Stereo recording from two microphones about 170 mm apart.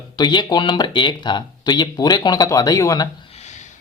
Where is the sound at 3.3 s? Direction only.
40° left (ahead or behind).